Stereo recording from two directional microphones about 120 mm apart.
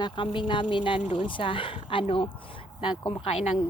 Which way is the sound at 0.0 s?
45° left (ahead or behind).